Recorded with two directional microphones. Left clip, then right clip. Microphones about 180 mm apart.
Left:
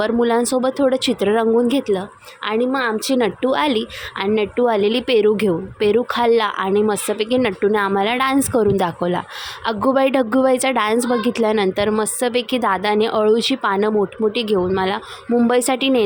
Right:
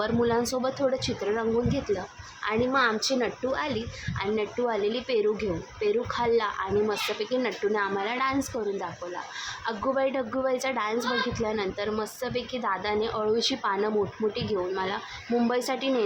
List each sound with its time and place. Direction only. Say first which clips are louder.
0.0 s a woman's voice: left 8 dB; 45° left (ahead or behind)